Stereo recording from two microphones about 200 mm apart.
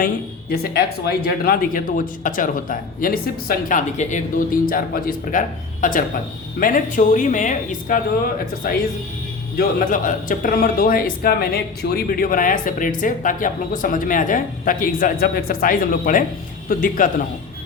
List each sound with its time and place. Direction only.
0.5 s speech: 55° left (ahead or behind)